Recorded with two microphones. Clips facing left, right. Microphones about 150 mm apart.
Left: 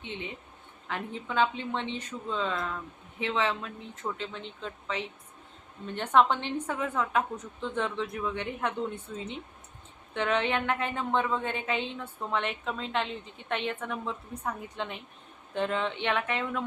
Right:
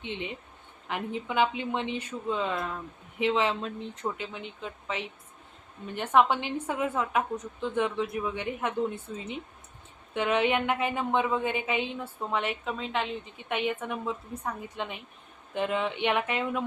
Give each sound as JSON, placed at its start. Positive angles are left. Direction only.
{"t": 0.0, "sound": "a woman's voice", "side_deg": -15}